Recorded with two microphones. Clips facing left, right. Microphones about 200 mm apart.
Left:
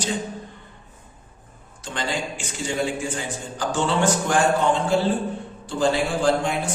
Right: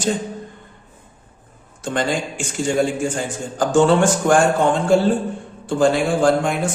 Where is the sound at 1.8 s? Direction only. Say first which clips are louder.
Right 6 dB; 50° right (ahead or behind).